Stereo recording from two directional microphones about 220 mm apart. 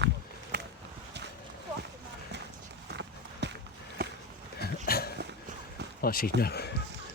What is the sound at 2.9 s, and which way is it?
Run, 50° right (ahead or behind).